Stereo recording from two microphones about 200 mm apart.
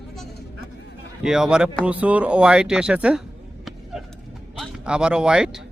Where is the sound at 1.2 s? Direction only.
5° right (ahead or behind).